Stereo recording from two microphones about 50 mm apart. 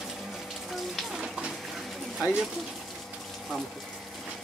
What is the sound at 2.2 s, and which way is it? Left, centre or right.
Speech, centre.